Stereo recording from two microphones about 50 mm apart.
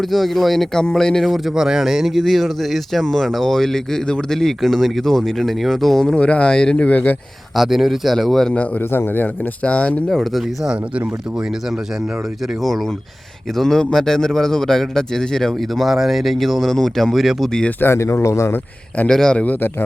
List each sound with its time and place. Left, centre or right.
0.0 s speech: centre
1.2 s speech: centre
6.1 s speech: left
7.5 s speech: centre
8.8 s a man's voice: left
9.6 s speech: left
10.1 s speech: centre
13.6 s a man's voice: centre
17.7 s a man's voice: left
17.9 s speech: left
19.0 s a man's voice: centre